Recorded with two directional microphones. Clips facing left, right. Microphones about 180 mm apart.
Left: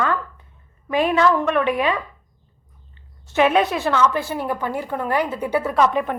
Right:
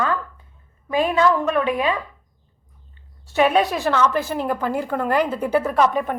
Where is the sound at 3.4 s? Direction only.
35° right (ahead or behind).